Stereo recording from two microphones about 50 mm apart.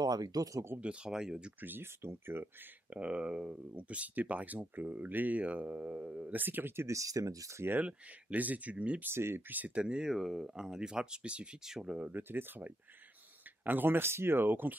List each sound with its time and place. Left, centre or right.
0.7 s speech: right
1.6 s speech: right
2.0 s speech: right
2.9 s speech: right
3.5 s speech: right
6.2 s speech: right
6.9 s speech: right
7.8 s speech: right
9.0 s speech: right
9.8 s speech: centre
10.0 s speech: centre
12.1 s speech: right